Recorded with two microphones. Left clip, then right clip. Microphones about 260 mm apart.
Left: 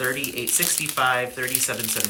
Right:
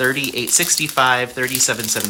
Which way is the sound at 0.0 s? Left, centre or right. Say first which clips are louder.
Right 7 dB; centre.